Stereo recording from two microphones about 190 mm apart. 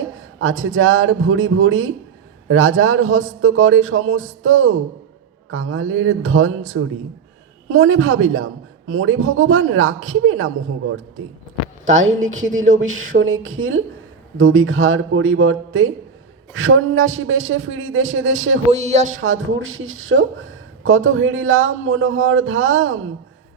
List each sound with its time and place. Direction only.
0.2 s a woman's voice: 90° right
7.7 s a woman's voice: 90° right
12.6 s speech: 40° right (ahead or behind)
13.1 s a woman's voice: 90° right
18.7 s speech: 35° right (ahead or behind)
19.2 s a woman's voice: 90° right